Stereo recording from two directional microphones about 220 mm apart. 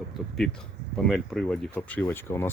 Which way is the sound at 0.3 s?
5° left (ahead or behind).